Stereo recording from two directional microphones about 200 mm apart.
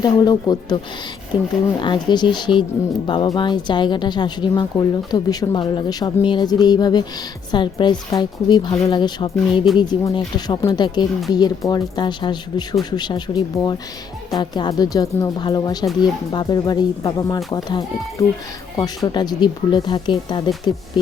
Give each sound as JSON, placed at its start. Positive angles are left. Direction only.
{"t": 0.0, "sound": "speech", "side_deg": 20}
{"t": 1.8, "sound": "speech", "side_deg": 25}